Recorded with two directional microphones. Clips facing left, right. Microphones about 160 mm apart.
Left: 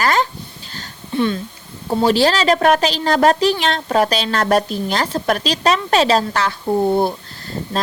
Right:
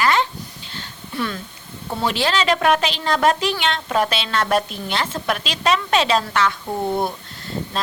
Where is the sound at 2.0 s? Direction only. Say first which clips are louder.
Left 5 dB; 35° left (ahead or behind).